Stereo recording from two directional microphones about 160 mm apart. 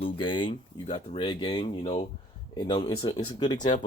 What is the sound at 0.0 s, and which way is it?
Speech, 30° left (ahead or behind).